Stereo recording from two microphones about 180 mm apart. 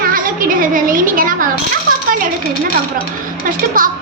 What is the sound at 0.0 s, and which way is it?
A child's voice, 50° right (ahead or behind).